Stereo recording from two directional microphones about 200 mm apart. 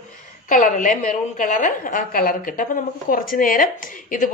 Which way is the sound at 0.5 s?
40° left (ahead or behind).